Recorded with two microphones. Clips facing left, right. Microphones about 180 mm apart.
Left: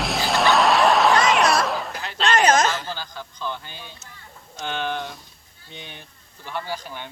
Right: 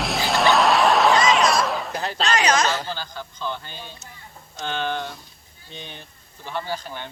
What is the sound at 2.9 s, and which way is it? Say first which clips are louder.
Speech: right 1 dB; 15° left (ahead or behind).